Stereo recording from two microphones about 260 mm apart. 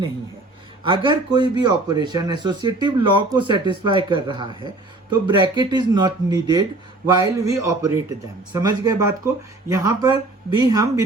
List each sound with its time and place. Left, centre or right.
0.9 s speech: centre